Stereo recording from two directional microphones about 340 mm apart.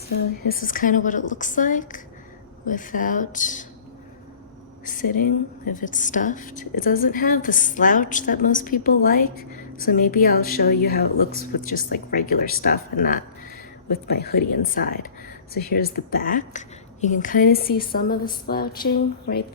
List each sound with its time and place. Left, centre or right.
0.6 s a woman's voice: left
4.9 s a woman's voice: left